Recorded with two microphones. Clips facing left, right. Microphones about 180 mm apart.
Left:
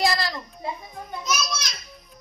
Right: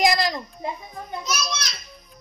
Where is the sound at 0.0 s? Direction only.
15° right (ahead or behind).